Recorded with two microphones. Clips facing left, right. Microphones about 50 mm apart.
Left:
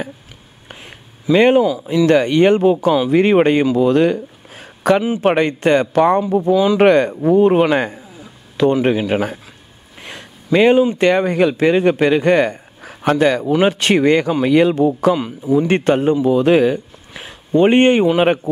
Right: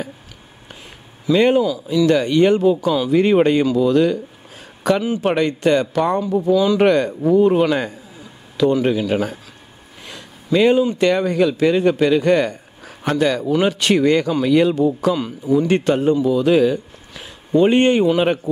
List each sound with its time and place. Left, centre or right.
1.3 s speech: left
3.7 s a sound: left
5.2 s speech: left
6.5 s speech: left
6.8 s speech: left
10.0 s a sound: left
11.0 s speech: left
15.1 s speech: centre
15.6 s speech: left